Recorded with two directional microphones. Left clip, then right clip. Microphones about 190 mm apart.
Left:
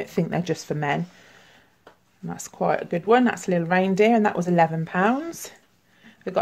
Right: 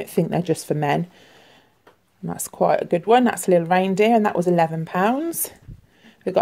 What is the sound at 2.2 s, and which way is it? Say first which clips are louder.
Speech: right 5 dB; 30° right (ahead or behind).